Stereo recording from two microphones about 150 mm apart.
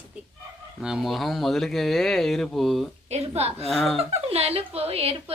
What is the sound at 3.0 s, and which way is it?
Speech, 45° right (ahead or behind).